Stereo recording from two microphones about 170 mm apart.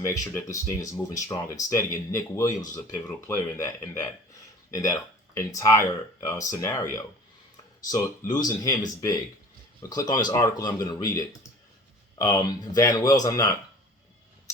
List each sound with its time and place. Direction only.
0.0 s speech: 15° left (ahead or behind)
9.9 s speech: 20° left (ahead or behind)